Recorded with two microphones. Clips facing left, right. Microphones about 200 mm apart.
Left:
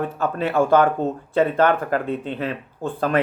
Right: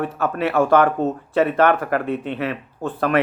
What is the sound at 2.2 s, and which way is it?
Speech, 30° left (ahead or behind).